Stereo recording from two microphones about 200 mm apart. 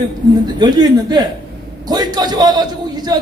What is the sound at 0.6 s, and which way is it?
A man's voice, 20° right (ahead or behind).